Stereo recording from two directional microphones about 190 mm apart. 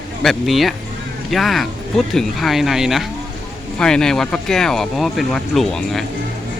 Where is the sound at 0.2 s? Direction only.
Centre (ahead or behind).